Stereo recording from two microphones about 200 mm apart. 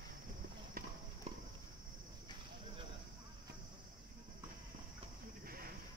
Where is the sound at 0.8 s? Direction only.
45° right (ahead or behind).